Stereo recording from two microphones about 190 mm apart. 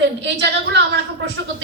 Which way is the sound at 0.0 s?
65° right (ahead or behind).